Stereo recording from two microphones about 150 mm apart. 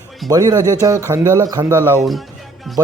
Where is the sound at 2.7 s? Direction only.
Centre (ahead or behind).